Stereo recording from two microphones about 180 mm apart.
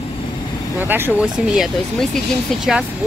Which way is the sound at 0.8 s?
10° right (ahead or behind).